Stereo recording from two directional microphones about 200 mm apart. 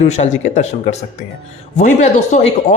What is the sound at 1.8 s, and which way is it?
Speech, 35° left (ahead or behind).